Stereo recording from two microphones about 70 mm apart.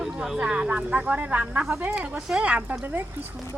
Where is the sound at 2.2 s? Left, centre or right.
Centre; by 3.0 s right.